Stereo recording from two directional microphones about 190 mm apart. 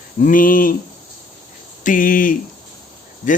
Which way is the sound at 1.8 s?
45° left (ahead or behind).